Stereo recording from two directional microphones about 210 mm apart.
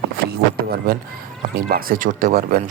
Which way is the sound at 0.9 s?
45° right (ahead or behind).